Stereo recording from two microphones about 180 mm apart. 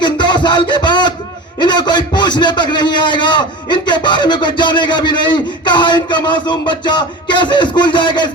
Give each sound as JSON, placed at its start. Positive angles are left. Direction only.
{"t": 0.0, "sound": "music", "side_deg": 25}
{"t": 1.5, "sound": "a man's voice", "side_deg": 25}